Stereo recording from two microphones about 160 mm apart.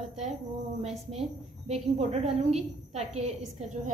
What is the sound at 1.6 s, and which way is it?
A woman's voice, 40° right (ahead or behind).